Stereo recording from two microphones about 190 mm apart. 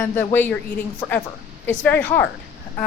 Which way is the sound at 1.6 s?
10° left (ahead or behind).